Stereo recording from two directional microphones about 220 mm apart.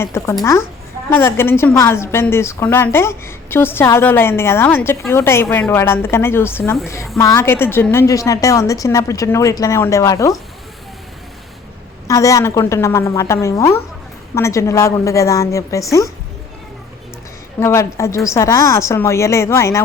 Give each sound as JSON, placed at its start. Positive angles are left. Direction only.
{"t": 0.0, "sound": "a woman's voice", "side_deg": 10}
{"t": 12.0, "sound": "a woman's voice", "side_deg": 15}
{"t": 17.6, "sound": "a woman's voice", "side_deg": 10}